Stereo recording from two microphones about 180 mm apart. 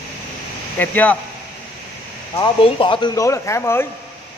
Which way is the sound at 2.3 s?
30° left (ahead or behind).